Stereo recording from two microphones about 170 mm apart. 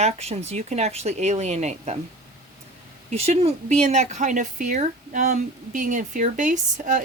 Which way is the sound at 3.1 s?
40° right (ahead or behind).